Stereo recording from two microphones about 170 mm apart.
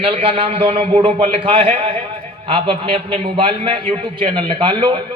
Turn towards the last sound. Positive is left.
turn(degrees=-30)  # may be behind; listen again after turning